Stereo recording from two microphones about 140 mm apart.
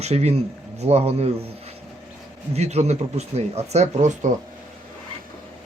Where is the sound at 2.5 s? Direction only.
50° right (ahead or behind).